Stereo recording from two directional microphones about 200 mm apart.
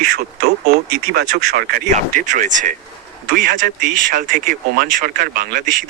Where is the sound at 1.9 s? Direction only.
40° right (ahead or behind).